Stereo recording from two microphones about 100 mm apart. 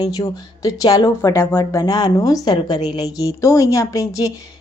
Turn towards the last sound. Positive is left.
turn(degrees=35)  # may be behind; listen again after turning